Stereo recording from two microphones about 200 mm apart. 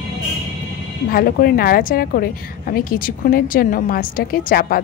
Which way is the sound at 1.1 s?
50° left (ahead or behind).